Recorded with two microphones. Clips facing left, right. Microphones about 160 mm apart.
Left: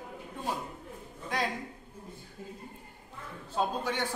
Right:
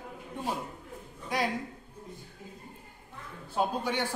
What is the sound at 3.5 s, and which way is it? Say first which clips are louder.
Speech: right 1 dB; 10° right (ahead or behind).